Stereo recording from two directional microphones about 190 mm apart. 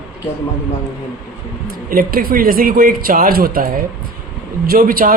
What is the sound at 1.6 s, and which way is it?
A man's voice, 50° right (ahead or behind).